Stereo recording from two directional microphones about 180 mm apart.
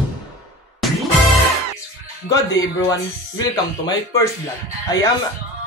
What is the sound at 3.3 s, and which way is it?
Speech, 20° left (ahead or behind).